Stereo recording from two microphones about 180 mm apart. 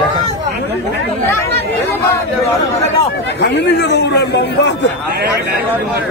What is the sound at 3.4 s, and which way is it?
A man's voice, 70° left (ahead or behind).